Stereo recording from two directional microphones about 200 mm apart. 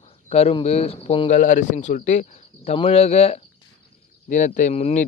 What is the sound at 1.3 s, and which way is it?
Speech, 40° left (ahead or behind).